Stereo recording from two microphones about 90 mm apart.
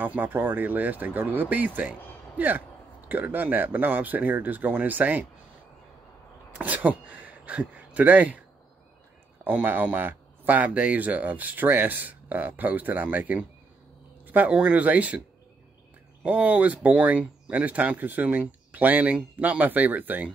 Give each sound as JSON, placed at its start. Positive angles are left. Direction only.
{"t": 0.0, "sound": "speech", "side_deg": -20}
{"t": 6.6, "sound": "speech", "side_deg": -20}
{"t": 9.4, "sound": "speech", "side_deg": -20}
{"t": 16.3, "sound": "speech", "side_deg": -15}